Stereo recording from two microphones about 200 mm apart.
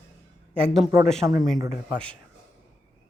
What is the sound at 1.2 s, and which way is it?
Speech, 15° right (ahead or behind).